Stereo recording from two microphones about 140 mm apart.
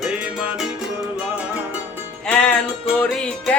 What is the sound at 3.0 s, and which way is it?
Music, 5° left (ahead or behind).